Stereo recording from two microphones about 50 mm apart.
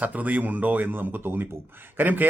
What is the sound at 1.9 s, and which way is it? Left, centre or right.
Speech, right.